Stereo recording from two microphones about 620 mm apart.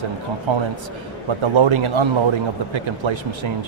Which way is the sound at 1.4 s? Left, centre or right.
Right.